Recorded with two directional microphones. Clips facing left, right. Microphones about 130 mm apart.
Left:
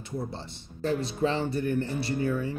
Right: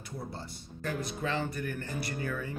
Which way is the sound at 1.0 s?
30° left (ahead or behind).